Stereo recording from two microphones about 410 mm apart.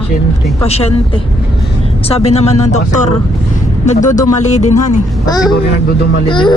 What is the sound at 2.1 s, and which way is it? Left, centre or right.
A man's voice, centre.